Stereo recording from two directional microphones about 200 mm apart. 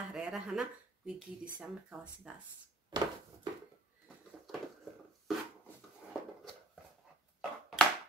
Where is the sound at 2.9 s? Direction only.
20° right (ahead or behind).